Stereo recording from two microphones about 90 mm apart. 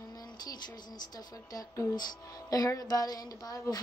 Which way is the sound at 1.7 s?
30° left (ahead or behind).